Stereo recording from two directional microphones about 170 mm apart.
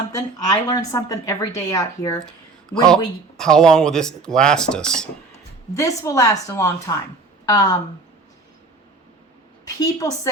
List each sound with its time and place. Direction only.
0.1 s a woman's voice: 20° left (ahead or behind)
2.6 s speech: 5° left (ahead or behind)
5.7 s a woman's voice: 20° left (ahead or behind)
9.6 s a woman's voice: 20° left (ahead or behind)